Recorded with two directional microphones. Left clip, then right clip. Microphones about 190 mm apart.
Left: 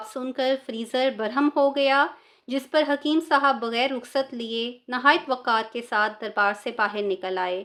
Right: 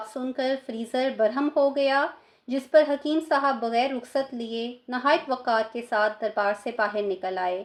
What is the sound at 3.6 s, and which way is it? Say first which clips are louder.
A woman's voice: even; 20° left (ahead or behind).